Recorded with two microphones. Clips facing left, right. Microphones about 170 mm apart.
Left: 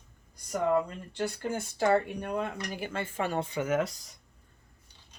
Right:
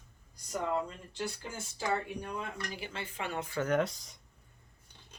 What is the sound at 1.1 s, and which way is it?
Speech, 55° left (ahead or behind).